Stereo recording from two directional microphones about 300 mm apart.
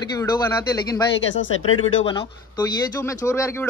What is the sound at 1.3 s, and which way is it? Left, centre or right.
Speech, left.